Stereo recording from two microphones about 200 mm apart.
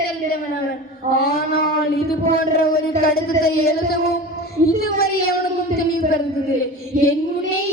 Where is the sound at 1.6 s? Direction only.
50° left (ahead or behind).